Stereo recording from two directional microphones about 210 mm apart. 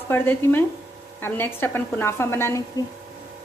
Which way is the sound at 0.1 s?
10° left (ahead or behind).